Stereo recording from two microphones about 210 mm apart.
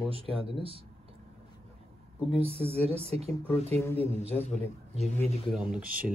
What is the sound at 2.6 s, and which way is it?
Speech, 30° right (ahead or behind).